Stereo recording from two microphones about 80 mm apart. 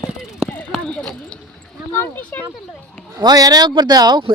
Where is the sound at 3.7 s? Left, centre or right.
Right.